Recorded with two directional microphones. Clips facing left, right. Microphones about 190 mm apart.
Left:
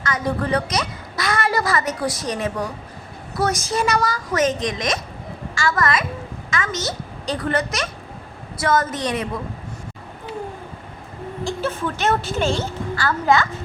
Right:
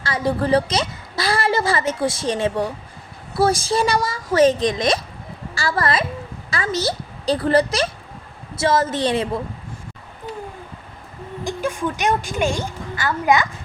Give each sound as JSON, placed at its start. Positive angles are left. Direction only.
{"t": 0.0, "sound": "a woman's voice", "side_deg": -30}
{"t": 11.4, "sound": "a woman's voice", "side_deg": -15}